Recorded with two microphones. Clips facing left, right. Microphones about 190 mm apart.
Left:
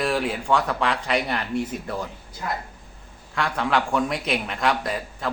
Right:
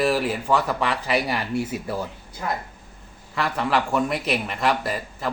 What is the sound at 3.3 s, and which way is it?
A man's voice, centre (ahead or behind).